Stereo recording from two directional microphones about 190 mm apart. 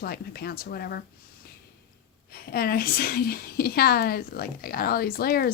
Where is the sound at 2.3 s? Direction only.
55° left (ahead or behind).